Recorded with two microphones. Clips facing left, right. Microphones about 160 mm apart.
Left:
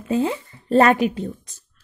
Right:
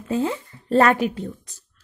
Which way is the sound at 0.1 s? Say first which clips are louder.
Left 2 dB; 15° left (ahead or behind).